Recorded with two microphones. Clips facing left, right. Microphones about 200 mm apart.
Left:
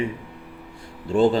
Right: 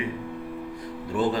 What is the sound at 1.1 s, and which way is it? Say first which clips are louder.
Speech: left 7 dB; 25° left (ahead or behind).